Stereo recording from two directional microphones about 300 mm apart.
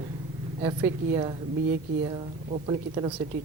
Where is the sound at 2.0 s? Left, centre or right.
Right.